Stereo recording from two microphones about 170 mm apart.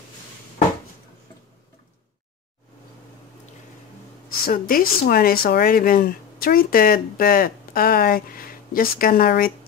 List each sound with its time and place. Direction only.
4.5 s speech: 60° left (ahead or behind)